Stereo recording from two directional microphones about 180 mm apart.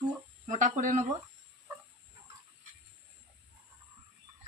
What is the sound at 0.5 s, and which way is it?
Speech, 45° right (ahead or behind).